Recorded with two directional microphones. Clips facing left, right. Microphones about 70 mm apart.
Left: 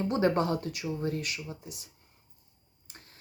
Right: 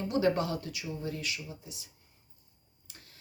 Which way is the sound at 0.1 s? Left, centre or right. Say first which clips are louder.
Left 1 dB; left.